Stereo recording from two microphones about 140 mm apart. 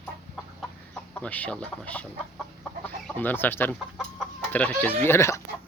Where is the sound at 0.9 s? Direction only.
10° left (ahead or behind).